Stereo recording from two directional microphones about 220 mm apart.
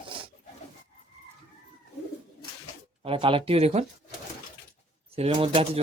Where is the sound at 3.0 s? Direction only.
25° right (ahead or behind).